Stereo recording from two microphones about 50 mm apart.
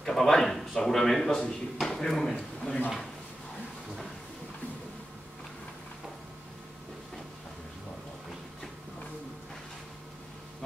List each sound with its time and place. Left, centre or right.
0.0 s speech: centre
2.3 s a man's voice: left